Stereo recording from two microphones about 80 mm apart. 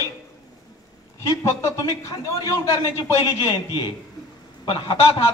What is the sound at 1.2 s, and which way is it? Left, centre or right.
A man's voice, left.